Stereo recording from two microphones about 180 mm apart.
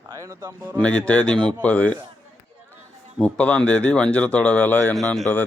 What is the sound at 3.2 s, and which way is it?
Speech, 5° left (ahead or behind).